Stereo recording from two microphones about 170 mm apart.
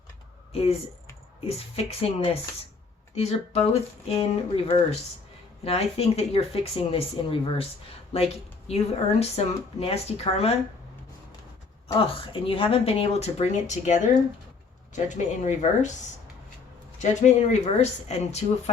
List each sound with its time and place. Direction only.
1.5 s speech: 35° left (ahead or behind)
11.9 s speech: 30° left (ahead or behind)
17.0 s speech: 45° left (ahead or behind)